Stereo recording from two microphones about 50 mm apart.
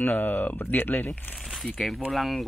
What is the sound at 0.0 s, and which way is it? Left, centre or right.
Speech, left.